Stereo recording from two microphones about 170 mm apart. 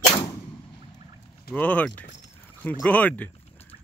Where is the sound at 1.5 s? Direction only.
10° left (ahead or behind).